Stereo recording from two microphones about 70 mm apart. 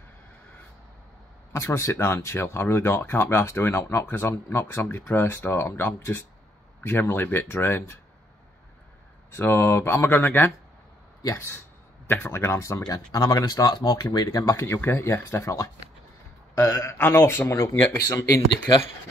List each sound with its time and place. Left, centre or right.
1.5 s speech: left
9.3 s speech: left
12.4 s a man's voice: left
12.8 s speech: left
14.4 s a man's voice: left
14.8 s speech: left
16.5 s a man's voice: left
18.0 s speech: left